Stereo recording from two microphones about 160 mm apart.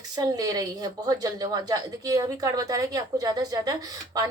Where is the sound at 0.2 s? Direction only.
25° right (ahead or behind).